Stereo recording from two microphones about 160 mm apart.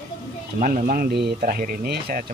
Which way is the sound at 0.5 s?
55° right (ahead or behind).